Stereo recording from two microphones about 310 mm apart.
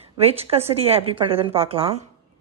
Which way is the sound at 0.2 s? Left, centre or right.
Centre.